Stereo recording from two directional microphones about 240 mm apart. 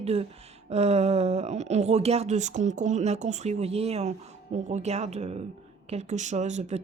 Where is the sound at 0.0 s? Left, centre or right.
Right.